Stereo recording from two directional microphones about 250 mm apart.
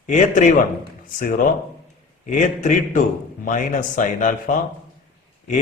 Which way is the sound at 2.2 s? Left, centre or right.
Left.